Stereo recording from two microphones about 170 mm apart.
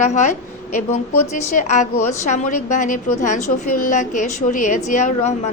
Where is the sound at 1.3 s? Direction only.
45° left (ahead or behind).